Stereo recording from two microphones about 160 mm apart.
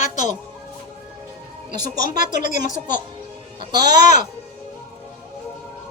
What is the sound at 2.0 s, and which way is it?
Speech, 55° left (ahead or behind).